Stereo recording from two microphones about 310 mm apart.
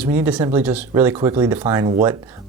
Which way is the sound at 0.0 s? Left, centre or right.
Centre.